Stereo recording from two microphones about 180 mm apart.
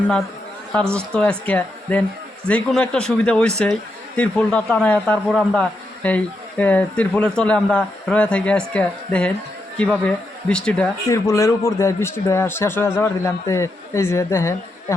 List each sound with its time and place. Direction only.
0.9 s a man's voice: 5° left (ahead or behind)
11.1 s a man's voice: 15° left (ahead or behind)